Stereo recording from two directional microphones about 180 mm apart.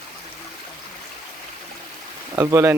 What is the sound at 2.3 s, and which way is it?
Speech, 15° right (ahead or behind).